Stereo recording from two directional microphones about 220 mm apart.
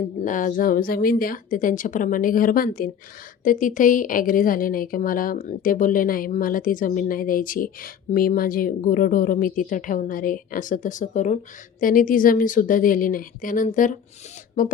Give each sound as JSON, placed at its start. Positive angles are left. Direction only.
{"t": 0.2, "sound": "a woman's voice", "side_deg": 35}